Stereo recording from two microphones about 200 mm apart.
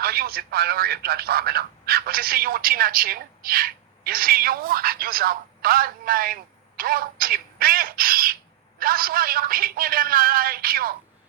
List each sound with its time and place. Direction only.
0.0 s a man's voice: 50° right (ahead or behind)